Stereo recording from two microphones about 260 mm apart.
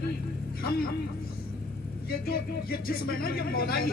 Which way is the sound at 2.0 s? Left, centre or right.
Left.